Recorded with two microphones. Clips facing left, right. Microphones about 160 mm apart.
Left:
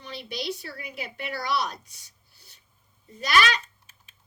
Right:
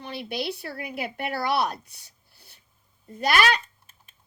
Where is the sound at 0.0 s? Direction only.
55° right (ahead or behind).